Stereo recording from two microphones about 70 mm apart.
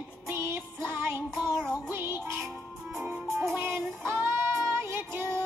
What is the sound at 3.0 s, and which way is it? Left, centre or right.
Music, right.